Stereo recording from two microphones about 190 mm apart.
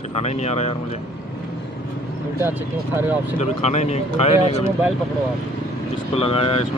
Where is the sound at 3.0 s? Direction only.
10° right (ahead or behind).